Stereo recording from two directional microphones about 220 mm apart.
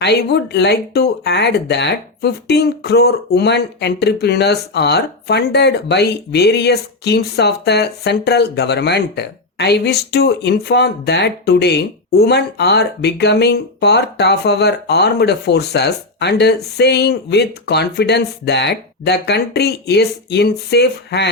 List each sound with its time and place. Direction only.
0.0 s speech: 50° left (ahead or behind)